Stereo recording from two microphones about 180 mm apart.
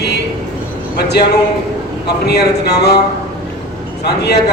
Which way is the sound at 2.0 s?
65° left (ahead or behind).